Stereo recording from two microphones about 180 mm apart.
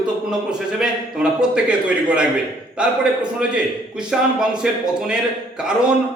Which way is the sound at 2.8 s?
5° right (ahead or behind).